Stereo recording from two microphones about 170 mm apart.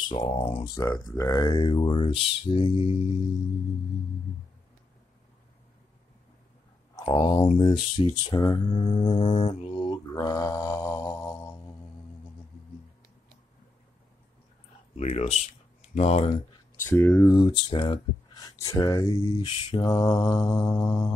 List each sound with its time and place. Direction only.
0.1 s speech: 25° left (ahead or behind)
0.7 s speech: 20° left (ahead or behind)
7.0 s speech: 20° left (ahead or behind)
15.0 s speech: 35° left (ahead or behind)
16.8 s speech: 15° left (ahead or behind)